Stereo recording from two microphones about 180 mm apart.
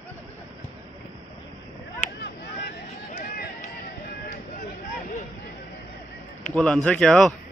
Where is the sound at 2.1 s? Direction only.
70° left (ahead or behind).